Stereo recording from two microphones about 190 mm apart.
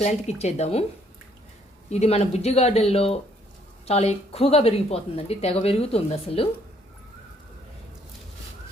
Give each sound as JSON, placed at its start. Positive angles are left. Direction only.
{"t": 0.0, "sound": "a woman's voice", "side_deg": 35}
{"t": 1.9, "sound": "a woman's voice", "side_deg": 35}